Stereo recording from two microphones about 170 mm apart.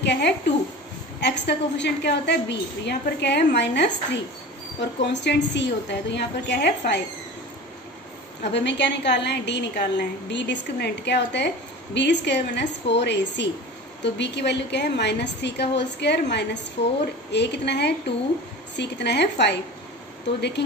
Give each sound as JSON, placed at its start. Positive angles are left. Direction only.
{"t": 0.0, "sound": "a woman's voice", "side_deg": 90}
{"t": 8.5, "sound": "a woman's voice", "side_deg": 90}